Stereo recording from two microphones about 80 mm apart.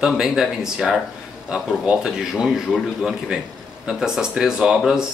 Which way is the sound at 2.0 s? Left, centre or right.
Centre.